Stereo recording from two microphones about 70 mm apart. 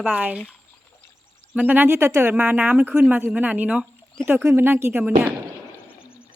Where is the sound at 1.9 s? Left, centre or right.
Right.